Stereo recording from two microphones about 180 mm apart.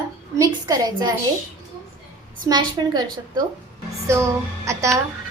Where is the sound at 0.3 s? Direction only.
20° right (ahead or behind).